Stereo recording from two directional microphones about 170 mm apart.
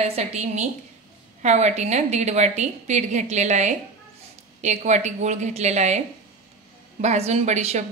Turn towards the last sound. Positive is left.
turn(degrees=-40)  # may be behind; listen again after turning